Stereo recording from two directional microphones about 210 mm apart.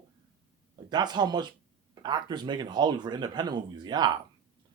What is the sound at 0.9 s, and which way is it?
Speech, 20° right (ahead or behind).